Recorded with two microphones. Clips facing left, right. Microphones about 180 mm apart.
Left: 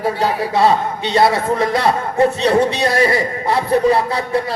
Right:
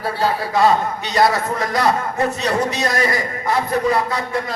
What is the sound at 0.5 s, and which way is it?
A man's voice, 30° left (ahead or behind).